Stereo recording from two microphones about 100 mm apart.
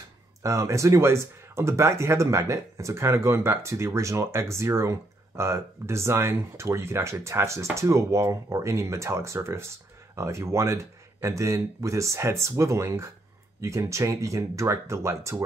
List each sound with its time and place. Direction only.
0.4 s speech: 30° right (ahead or behind)